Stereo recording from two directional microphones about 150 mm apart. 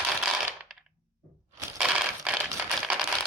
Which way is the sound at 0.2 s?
5° right (ahead or behind).